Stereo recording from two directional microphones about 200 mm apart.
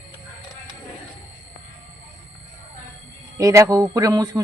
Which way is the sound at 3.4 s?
15° right (ahead or behind).